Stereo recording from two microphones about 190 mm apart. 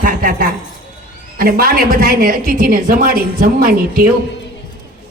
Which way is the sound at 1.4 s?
50° right (ahead or behind).